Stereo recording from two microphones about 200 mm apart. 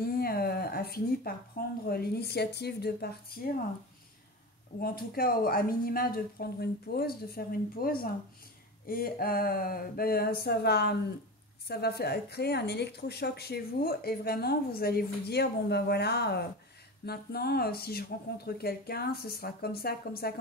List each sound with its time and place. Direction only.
0.0 s a sound: 50° left (ahead or behind)
1.9 s a woman's voice: 50° left (ahead or behind)
4.7 s a woman's voice: 45° left (ahead or behind)